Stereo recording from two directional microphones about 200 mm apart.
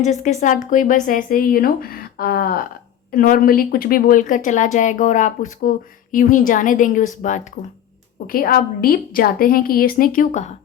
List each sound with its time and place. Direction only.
0.0 s a woman's voice: 35° left (ahead or behind)